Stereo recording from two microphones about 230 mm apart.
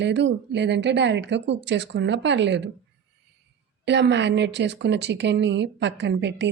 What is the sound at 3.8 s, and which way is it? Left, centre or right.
Speech, right.